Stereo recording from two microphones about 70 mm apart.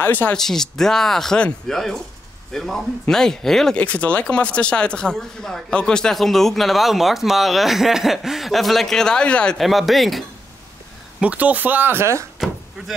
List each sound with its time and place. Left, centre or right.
0.0 s speech: left
0.3 s speech: centre
3.7 s speech: centre
9.6 s speech: centre
11.1 s speech: right